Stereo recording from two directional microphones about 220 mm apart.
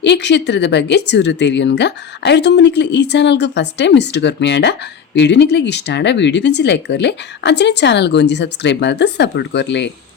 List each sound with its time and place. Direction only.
0.0 s speech: 50° left (ahead or behind)